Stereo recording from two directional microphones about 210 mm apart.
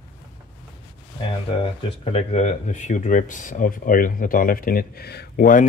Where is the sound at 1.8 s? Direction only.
30° left (ahead or behind).